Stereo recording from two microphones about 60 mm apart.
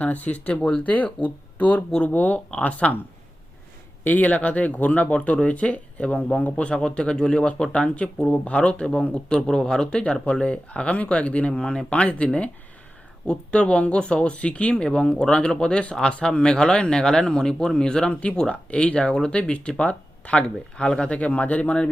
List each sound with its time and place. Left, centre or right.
0.0 s speech: left
4.0 s speech: left